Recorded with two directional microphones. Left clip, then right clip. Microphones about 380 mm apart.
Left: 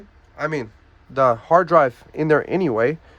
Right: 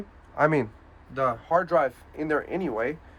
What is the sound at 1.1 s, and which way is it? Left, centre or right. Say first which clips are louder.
Speech: left 9 dB; centre.